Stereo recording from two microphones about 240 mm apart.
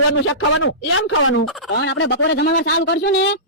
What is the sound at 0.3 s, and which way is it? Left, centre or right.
Fowl, left.